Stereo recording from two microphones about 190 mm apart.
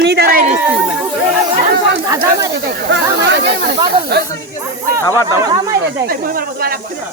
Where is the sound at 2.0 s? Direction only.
15° right (ahead or behind).